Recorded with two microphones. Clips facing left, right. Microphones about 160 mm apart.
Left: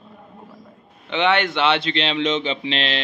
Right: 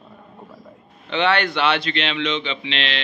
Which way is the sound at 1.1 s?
20° left (ahead or behind).